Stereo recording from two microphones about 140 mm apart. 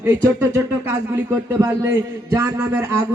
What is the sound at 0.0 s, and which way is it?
A man's voice, 15° right (ahead or behind).